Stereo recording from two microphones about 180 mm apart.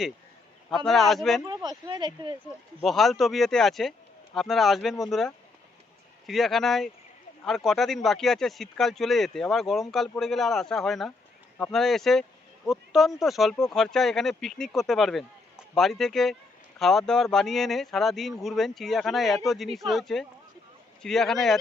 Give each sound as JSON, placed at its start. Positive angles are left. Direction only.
{"t": 0.9, "sound": "speech", "side_deg": 0}
{"t": 1.5, "sound": "speech", "side_deg": -25}
{"t": 2.8, "sound": "speech", "side_deg": 0}
{"t": 6.2, "sound": "speech", "side_deg": 0}